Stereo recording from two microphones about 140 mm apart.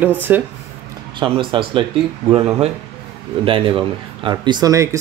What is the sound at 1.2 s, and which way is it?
Speech, 35° right (ahead or behind).